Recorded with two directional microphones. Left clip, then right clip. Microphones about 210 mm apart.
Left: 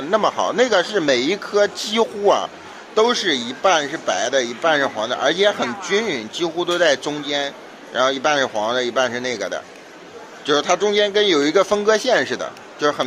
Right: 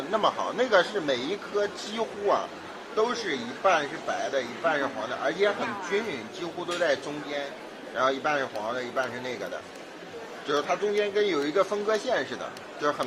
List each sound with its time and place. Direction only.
0.1 s speech: 35° left (ahead or behind)